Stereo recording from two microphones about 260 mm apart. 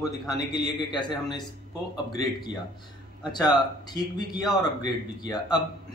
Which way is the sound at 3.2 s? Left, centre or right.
Centre.